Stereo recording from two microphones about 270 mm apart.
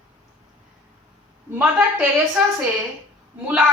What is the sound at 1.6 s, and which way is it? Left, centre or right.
Speech, centre.